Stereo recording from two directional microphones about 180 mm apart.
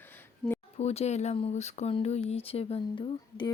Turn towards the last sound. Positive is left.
turn(degrees=25)  # may be behind; listen again after turning